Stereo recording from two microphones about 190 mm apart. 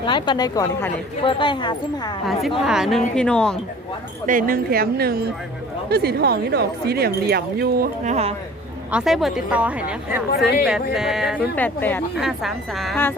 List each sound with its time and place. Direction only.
0.0 s a woman's voice: 25° left (ahead or behind)
2.6 s a woman's voice: 5° right (ahead or behind)
4.3 s speech: 45° right (ahead or behind)
8.0 s speech: 35° right (ahead or behind)
8.9 s a woman's voice: 5° right (ahead or behind)
11.5 s speech: 10° left (ahead or behind)
12.1 s a woman's voice: centre (ahead or behind)